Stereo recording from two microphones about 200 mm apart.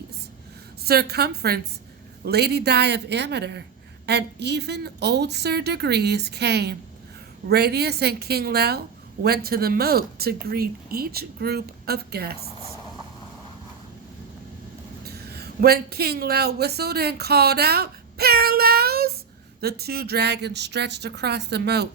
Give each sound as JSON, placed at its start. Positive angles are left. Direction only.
{"t": 0.9, "sound": "a woman's voice", "side_deg": -50}
{"t": 15.0, "sound": "a woman's voice", "side_deg": -50}